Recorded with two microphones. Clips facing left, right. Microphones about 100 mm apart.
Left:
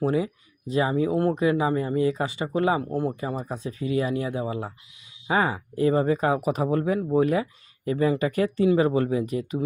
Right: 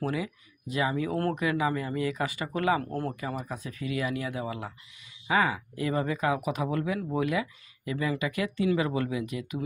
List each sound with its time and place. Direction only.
0.0 s speech: 30° left (ahead or behind)
1.4 s speech: 30° left (ahead or behind)
3.2 s speech: 30° left (ahead or behind)